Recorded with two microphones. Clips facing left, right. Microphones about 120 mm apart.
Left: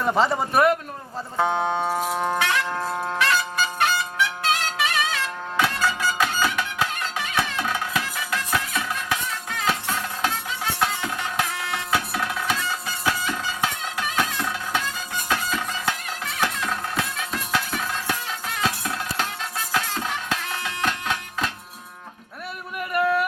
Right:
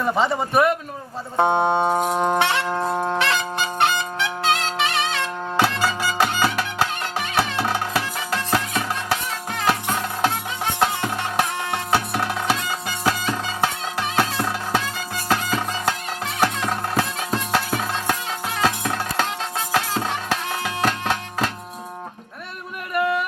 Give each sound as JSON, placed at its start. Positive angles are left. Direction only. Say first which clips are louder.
{"t": 0.0, "sound": "a man's voice", "louder": "even", "side_deg": 0}
{"t": 1.5, "sound": "music", "louder": "right 5 dB", "side_deg": -55}
{"t": 1.7, "sound": "music", "louder": "right 5 dB", "side_deg": -25}
{"t": 2.1, "sound": "brass instrument", "louder": "right 4 dB", "side_deg": -25}
{"t": 7.3, "sound": "music", "louder": "right 4 dB", "side_deg": -30}
{"t": 10.2, "sound": "music", "louder": "right 4 dB", "side_deg": -20}
{"t": 10.8, "sound": "music", "louder": "right 5 dB", "side_deg": -35}
{"t": 22.9, "sound": "a sound", "louder": "even", "side_deg": 0}